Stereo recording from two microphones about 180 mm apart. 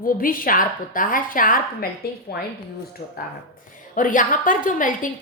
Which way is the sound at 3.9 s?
50° left (ahead or behind).